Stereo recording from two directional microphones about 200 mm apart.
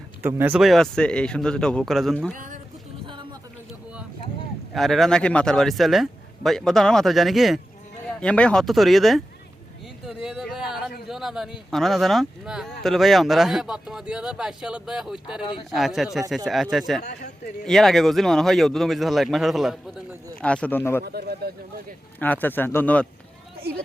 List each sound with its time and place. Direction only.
0.2 s speech: 10° right (ahead or behind)
2.3 s speech: 40° right (ahead or behind)
4.7 s speech: centre (ahead or behind)
10.2 s a sound: centre (ahead or behind)
11.7 s speech: centre (ahead or behind)
21.0 s speech: 50° right (ahead or behind)
22.2 s speech: 10° left (ahead or behind)